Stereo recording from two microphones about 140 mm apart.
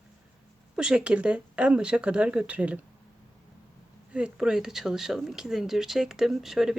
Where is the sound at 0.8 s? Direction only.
5° right (ahead or behind).